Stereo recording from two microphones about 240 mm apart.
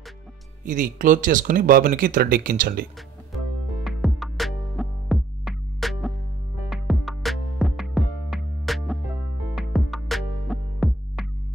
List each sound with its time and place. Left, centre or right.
0.7 s speech: right
3.8 s music: centre